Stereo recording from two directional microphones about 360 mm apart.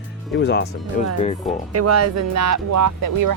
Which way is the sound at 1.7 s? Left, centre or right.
Right.